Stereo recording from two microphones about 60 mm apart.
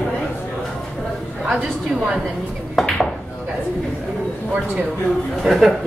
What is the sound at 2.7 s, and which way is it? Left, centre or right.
Dishes, centre.